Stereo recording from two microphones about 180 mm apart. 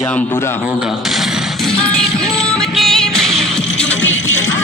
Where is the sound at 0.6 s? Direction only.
5° right (ahead or behind).